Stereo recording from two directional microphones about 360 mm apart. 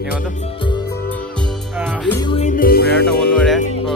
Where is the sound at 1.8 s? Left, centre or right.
Centre; by 3.1 s left.